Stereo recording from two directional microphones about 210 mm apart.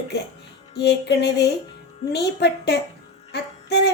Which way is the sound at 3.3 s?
50° left (ahead or behind).